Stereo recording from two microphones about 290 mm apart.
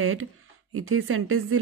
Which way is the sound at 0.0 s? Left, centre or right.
Right.